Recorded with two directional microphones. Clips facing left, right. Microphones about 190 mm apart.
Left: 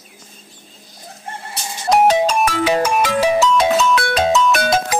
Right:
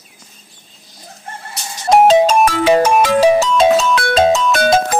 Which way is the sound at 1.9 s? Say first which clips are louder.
Right 4 dB; 25° right (ahead or behind).